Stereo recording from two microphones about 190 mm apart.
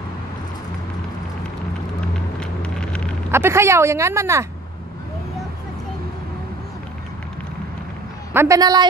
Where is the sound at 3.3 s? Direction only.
15° right (ahead or behind).